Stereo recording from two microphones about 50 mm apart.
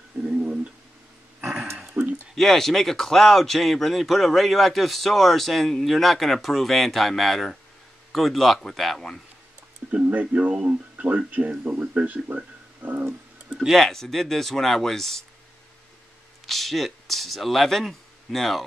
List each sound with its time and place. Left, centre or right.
0.2 s a sound: right
1.4 s dog: centre
1.8 s a sound: centre
2.3 s speech: centre
10.0 s speech: right
13.5 s tick-tock: centre
13.7 s speech: centre
16.4 s speech: centre